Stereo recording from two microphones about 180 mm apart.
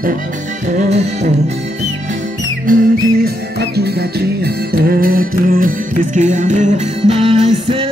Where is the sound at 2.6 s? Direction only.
55° right (ahead or behind).